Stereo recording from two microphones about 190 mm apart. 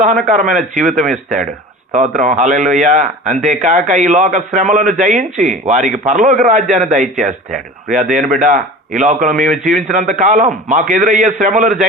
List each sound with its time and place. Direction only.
0.0 s a man's voice: 40° right (ahead or behind)